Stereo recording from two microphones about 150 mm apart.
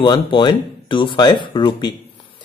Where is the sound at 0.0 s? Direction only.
30° left (ahead or behind).